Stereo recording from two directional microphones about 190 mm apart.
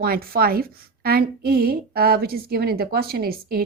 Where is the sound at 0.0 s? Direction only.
50° right (ahead or behind).